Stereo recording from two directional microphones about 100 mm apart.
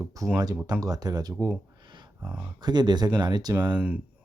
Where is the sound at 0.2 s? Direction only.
35° right (ahead or behind).